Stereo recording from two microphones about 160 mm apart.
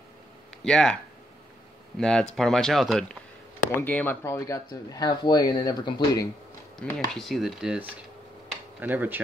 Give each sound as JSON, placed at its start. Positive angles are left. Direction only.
{"t": 0.7, "sound": "speech", "side_deg": 5}
{"t": 2.0, "sound": "speech", "side_deg": 5}
{"t": 6.8, "sound": "speech", "side_deg": 5}